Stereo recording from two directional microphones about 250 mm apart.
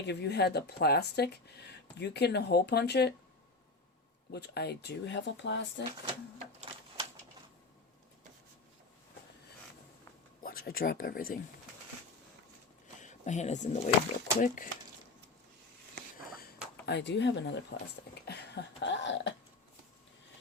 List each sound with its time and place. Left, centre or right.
0.1 s speech: left
4.3 s speech: left
10.4 s speech: left
13.0 s speech: left
16.8 s speech: left